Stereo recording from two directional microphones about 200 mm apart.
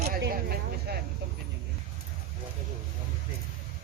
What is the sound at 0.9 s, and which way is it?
Speech, 50° right (ahead or behind).